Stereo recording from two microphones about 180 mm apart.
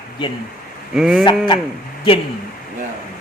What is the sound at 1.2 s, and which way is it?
Speech, 30° left (ahead or behind).